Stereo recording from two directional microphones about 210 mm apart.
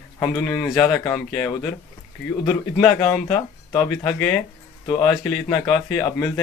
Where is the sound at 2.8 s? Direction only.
15° left (ahead or behind).